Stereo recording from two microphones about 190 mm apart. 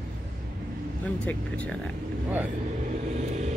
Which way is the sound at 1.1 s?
5° left (ahead or behind).